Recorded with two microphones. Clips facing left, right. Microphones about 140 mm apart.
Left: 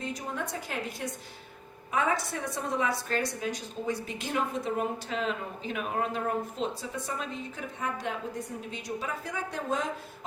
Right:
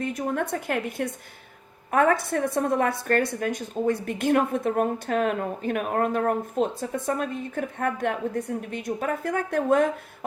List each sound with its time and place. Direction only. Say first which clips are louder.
0.0 s a woman's voice: right 8 dB; 55° right (ahead or behind)